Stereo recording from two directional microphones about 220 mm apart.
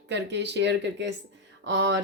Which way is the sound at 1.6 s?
55° right (ahead or behind).